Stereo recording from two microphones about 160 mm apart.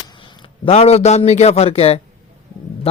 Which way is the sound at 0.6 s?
40° left (ahead or behind).